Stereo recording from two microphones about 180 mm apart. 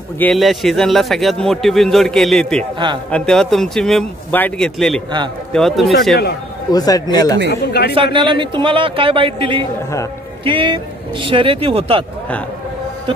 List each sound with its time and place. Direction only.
0.2 s a man's voice: centre (ahead or behind)
6.7 s speech: 20° left (ahead or behind)
7.9 s a man's voice: 30° right (ahead or behind)